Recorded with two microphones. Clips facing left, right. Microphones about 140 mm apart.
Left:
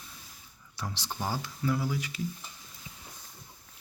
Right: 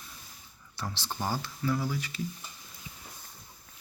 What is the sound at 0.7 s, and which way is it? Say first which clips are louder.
Speech: right 1 dB; 15° left (ahead or behind).